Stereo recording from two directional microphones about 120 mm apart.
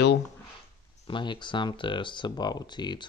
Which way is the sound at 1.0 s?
40° left (ahead or behind).